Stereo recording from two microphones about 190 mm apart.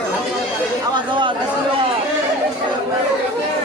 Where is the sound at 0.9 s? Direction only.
25° right (ahead or behind).